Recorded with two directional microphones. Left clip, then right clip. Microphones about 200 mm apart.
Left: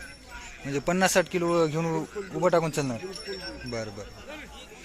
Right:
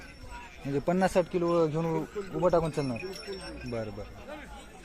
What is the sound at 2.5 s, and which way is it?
Speech, 5° left (ahead or behind).